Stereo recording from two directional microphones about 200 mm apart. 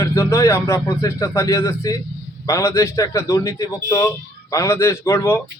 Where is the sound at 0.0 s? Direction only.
15° left (ahead or behind).